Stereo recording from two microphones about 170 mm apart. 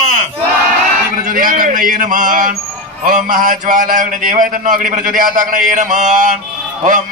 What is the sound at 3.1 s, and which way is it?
Mantra, 50° right (ahead or behind).